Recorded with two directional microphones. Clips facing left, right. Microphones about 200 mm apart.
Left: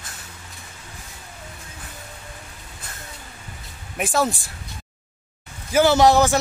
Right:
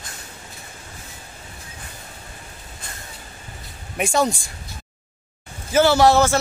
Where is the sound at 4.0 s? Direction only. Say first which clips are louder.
Right 2 dB; centre (ahead or behind).